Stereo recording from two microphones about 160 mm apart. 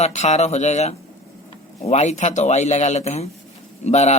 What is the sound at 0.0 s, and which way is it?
A man's voice, 45° left (ahead or behind).